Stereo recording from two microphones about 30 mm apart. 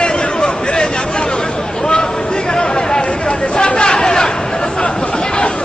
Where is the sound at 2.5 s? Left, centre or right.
Left.